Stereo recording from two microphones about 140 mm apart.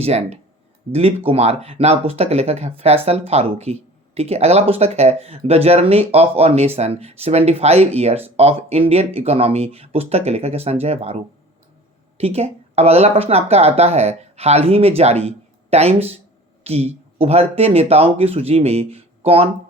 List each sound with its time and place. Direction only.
0.0 s speech: 50° right (ahead or behind)